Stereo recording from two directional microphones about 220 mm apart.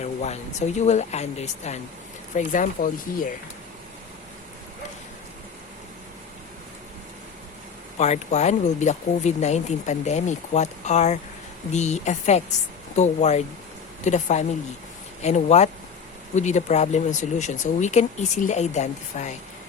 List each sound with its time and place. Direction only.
0.0 s a sound: 30° left (ahead or behind)
0.8 s speech: 30° left (ahead or behind)
7.9 s speech: 30° left (ahead or behind)